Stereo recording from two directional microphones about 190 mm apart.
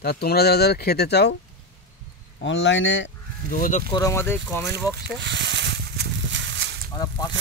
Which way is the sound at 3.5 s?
45° left (ahead or behind).